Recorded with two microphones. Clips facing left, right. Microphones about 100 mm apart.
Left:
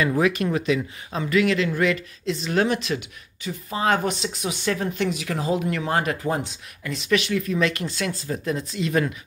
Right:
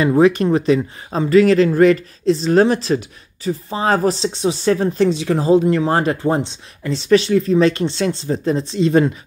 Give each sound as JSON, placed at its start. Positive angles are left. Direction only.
{"t": 0.0, "sound": "speech", "side_deg": -30}